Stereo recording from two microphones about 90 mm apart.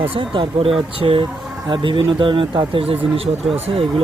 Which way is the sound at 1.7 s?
65° right (ahead or behind).